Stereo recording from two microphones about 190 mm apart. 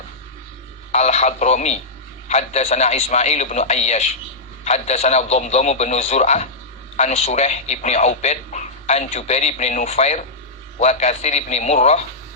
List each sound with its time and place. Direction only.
0.9 s a man's voice: 35° left (ahead or behind)